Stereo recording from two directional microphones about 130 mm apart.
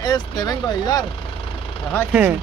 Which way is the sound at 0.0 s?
30° left (ahead or behind).